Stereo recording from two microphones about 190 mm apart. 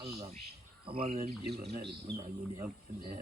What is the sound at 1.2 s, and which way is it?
Speech, 55° right (ahead or behind).